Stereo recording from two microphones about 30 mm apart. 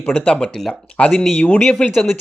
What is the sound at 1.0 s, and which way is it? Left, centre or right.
Speech, left.